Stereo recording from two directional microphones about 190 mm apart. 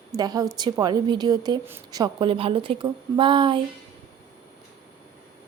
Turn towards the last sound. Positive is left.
turn(degrees=-25)  # may be behind; listen again after turning